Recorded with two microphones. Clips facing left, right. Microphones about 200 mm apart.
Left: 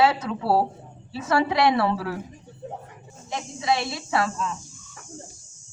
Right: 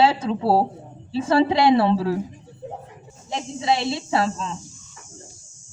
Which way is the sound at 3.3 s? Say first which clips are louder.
Right 2 dB; 25° right (ahead or behind).